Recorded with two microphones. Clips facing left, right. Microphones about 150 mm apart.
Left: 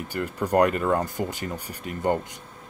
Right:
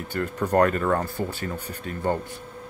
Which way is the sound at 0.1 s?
10° left (ahead or behind).